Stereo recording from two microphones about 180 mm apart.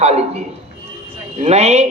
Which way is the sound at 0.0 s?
35° right (ahead or behind).